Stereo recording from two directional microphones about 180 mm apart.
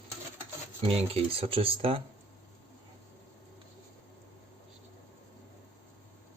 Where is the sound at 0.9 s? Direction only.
35° right (ahead or behind).